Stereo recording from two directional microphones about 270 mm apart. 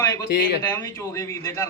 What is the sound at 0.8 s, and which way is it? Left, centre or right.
Speech, centre.